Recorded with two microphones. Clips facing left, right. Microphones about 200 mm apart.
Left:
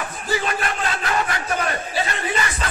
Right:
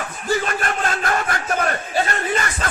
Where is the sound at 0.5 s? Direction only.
50° right (ahead or behind).